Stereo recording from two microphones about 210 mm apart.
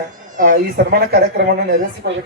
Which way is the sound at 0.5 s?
50° right (ahead or behind).